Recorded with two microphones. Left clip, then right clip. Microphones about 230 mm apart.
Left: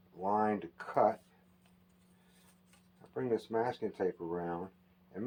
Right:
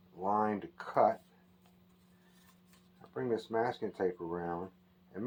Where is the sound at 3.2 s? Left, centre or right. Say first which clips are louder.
Even; centre.